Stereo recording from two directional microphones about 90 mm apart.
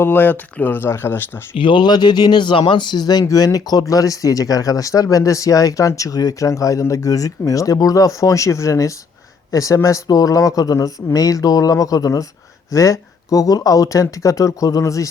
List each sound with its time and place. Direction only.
0.0 s speech: 25° left (ahead or behind)
1.5 s speech: 65° left (ahead or behind); by 15.1 s 35° left (ahead or behind)